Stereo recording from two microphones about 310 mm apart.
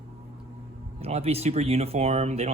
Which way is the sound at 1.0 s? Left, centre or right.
Centre.